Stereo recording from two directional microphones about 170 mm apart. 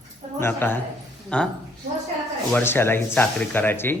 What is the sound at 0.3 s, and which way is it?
Speech, 15° left (ahead or behind).